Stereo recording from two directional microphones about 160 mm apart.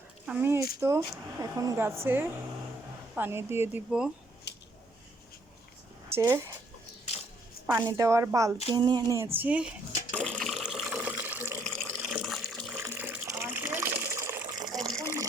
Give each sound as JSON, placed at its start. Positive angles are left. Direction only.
{"t": 0.3, "sound": "a sound", "side_deg": -15}
{"t": 0.8, "sound": "speech", "side_deg": -15}
{"t": 4.5, "sound": "a sound", "side_deg": 90}
{"t": 6.1, "sound": "a woman's voice", "side_deg": -15}
{"t": 7.9, "sound": "speech", "side_deg": -20}
{"t": 8.6, "sound": "bathtub", "side_deg": -30}
{"t": 12.8, "sound": "water", "side_deg": -10}